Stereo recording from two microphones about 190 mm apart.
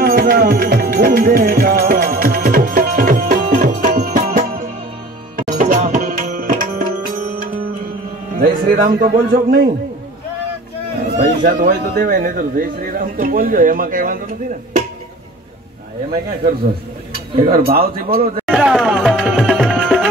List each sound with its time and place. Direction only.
0.0 s music: 50° right (ahead or behind)
5.5 s tabla: 45° right (ahead or behind)
8.4 s speech: 50° right (ahead or behind)
11.1 s a man's voice: 45° right (ahead or behind)
17.5 s a man's voice: 50° right (ahead or behind)
18.5 s music: 5° right (ahead or behind)